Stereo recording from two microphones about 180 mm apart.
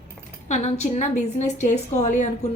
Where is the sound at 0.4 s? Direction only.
40° left (ahead or behind).